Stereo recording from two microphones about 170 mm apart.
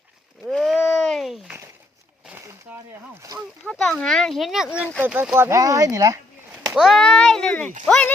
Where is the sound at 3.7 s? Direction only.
5° left (ahead or behind); by 6.2 s 20° right (ahead or behind).